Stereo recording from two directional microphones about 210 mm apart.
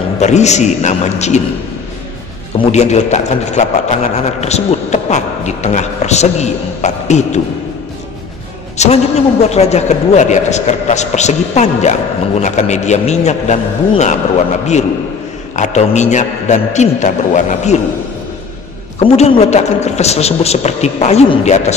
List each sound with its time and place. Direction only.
0.2 s a man's voice: 30° left (ahead or behind)
2.7 s a man's voice: 30° left (ahead or behind)
8.7 s a man's voice: 30° left (ahead or behind)
18.9 s a man's voice: 30° left (ahead or behind)